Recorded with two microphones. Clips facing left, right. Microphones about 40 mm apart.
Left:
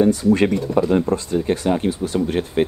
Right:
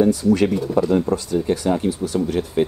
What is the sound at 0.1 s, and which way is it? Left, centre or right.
Speech, left.